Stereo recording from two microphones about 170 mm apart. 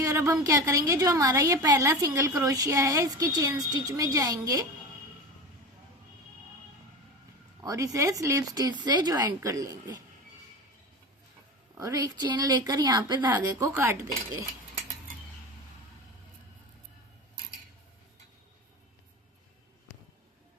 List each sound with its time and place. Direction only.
0.0 s a woman's voice: 15° right (ahead or behind)
7.6 s a woman's voice: 20° right (ahead or behind)
11.7 s a woman's voice: 20° right (ahead or behind)